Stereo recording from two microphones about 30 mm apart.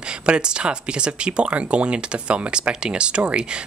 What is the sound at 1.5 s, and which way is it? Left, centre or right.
Speech, right.